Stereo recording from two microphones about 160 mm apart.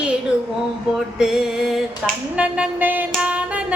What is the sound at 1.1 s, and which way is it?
Music, centre (ahead or behind).